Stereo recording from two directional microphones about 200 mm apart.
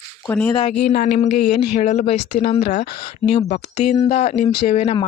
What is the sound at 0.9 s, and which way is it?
Speech, 50° left (ahead or behind).